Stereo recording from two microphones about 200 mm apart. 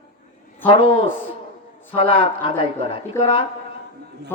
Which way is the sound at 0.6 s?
25° left (ahead or behind).